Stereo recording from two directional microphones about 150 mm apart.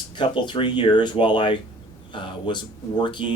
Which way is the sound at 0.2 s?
30° left (ahead or behind).